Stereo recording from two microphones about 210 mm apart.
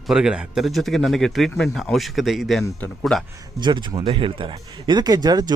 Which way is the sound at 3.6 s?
20° right (ahead or behind).